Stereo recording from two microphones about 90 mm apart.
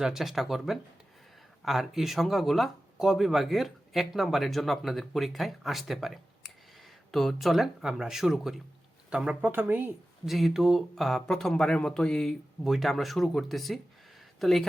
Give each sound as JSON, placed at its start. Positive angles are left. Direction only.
{"t": 0.0, "sound": "speech", "side_deg": -5}
{"t": 9.4, "sound": "speech", "side_deg": -20}
{"t": 10.2, "sound": "speech", "side_deg": 0}